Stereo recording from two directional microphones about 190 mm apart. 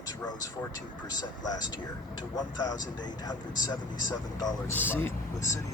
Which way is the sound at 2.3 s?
20° left (ahead or behind).